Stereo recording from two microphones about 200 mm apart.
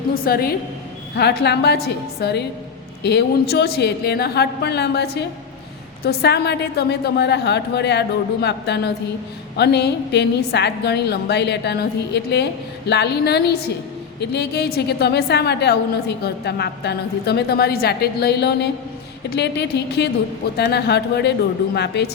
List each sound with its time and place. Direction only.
0.1 s a woman's voice: 50° left (ahead or behind)